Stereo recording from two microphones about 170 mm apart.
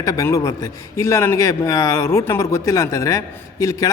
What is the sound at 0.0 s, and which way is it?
A man's voice, 20° left (ahead or behind).